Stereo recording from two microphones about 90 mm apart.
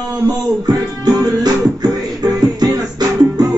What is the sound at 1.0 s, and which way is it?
Music, 50° right (ahead or behind).